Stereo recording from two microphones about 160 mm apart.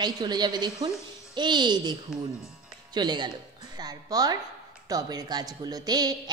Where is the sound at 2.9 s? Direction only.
25° right (ahead or behind).